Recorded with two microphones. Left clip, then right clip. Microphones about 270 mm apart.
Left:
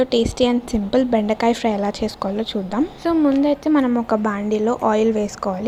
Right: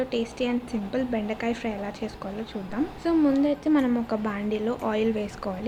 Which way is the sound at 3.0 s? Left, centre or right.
Centre.